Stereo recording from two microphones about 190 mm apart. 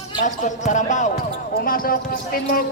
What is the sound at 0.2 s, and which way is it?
Speech, 40° left (ahead or behind).